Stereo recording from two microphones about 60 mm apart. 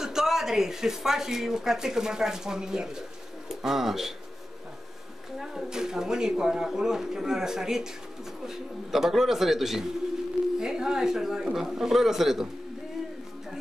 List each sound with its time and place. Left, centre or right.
0.0 s a man's voice: centre
5.4 s a man's voice: centre